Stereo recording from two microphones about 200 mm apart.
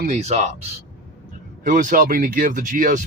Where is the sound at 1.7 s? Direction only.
45° right (ahead or behind).